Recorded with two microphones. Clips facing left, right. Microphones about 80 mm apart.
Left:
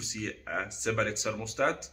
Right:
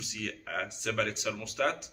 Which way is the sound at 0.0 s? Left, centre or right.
Left.